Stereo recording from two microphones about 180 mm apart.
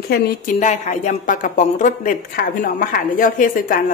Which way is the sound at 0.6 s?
45° left (ahead or behind).